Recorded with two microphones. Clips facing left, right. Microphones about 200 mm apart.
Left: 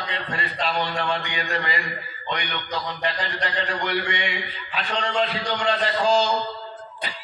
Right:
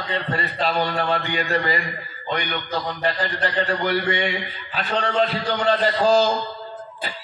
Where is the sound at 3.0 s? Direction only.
40° right (ahead or behind).